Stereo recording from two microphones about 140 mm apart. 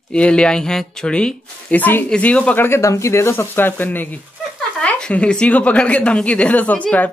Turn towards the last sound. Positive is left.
turn(degrees=10)  # may be behind; listen again after turning